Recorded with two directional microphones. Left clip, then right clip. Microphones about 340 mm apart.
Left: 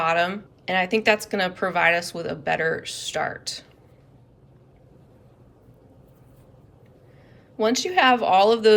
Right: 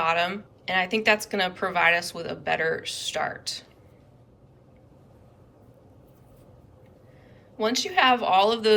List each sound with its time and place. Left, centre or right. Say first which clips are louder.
0.0 s a woman's voice: left 2 dB; centre
7.5 s a woman's voice: left 3 dB; centre